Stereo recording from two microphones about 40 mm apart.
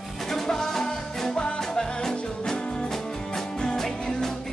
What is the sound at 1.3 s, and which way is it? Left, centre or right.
Music, left.